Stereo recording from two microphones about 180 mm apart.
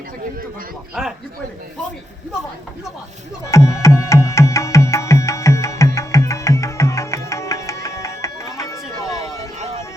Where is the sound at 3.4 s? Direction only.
15° left (ahead or behind).